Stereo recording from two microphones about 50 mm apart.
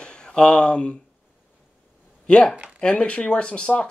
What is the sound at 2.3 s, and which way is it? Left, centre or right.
Speech, centre.